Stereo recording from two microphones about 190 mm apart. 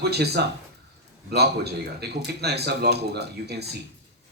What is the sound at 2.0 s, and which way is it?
Speech, 60° right (ahead or behind).